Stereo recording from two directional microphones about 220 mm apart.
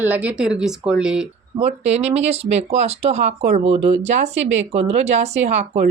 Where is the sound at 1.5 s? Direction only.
30° right (ahead or behind).